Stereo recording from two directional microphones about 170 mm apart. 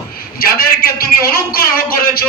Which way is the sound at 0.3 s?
60° left (ahead or behind).